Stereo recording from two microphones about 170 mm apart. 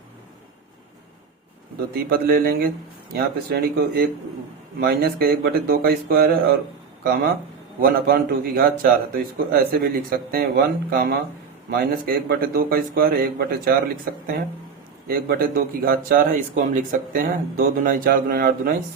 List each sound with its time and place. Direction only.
1.9 s speech: 60° right (ahead or behind)